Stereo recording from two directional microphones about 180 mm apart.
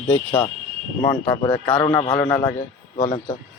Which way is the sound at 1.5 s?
5° left (ahead or behind).